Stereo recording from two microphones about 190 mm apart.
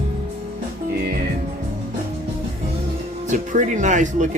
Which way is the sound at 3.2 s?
40° right (ahead or behind).